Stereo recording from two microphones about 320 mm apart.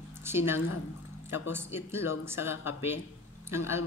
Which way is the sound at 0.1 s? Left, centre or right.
Centre.